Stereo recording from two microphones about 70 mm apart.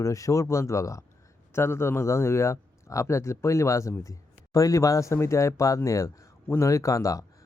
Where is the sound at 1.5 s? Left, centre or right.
Left.